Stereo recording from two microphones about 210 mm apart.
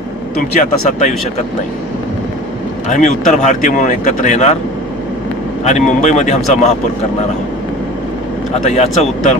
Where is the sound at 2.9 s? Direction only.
35° left (ahead or behind).